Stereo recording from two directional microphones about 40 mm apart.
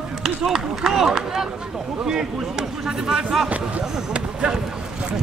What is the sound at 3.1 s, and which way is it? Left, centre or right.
Speech, centre.